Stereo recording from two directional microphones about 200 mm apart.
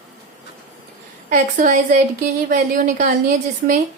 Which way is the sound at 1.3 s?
40° right (ahead or behind).